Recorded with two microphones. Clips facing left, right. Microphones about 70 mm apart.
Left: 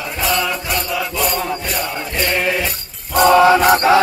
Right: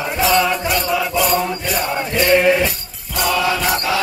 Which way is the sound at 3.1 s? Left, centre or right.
Left.